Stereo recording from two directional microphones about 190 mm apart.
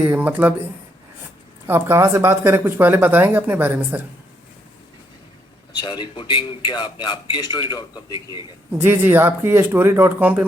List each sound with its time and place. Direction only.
0.0 s speech: 10° right (ahead or behind)
1.6 s speech: 10° right (ahead or behind)
5.7 s speech: 25° left (ahead or behind)
8.8 s speech: 10° right (ahead or behind)